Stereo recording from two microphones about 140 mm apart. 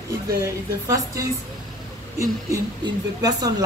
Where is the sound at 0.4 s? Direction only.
25° right (ahead or behind).